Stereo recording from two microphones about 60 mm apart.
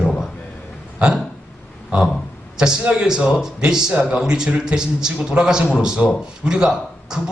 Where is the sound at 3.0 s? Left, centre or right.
Centre.